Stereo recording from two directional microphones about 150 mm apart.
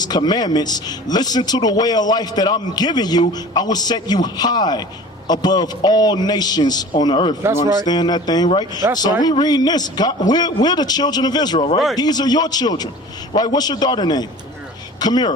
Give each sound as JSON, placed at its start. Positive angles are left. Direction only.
{"t": 0.0, "sound": "a man's voice", "side_deg": 25}
{"t": 7.4, "sound": "speech", "side_deg": -15}
{"t": 7.9, "sound": "a man's voice", "side_deg": 30}